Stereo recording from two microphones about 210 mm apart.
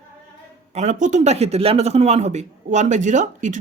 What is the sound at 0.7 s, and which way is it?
A man's voice, 35° right (ahead or behind).